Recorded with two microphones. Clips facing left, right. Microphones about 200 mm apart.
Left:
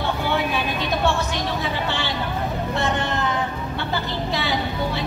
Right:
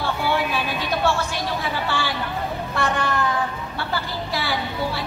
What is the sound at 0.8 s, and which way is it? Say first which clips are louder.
Music: even; 20° left (ahead or behind).